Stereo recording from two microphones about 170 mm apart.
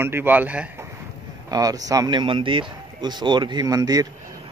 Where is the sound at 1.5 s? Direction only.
20° right (ahead or behind).